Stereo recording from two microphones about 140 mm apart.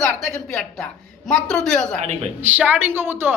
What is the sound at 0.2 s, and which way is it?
Speech, 5° left (ahead or behind).